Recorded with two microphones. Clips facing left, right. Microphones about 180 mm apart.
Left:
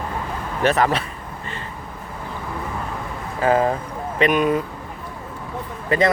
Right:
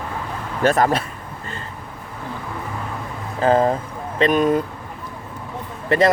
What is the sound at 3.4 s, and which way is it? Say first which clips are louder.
Speech: right 2 dB; 30° right (ahead or behind).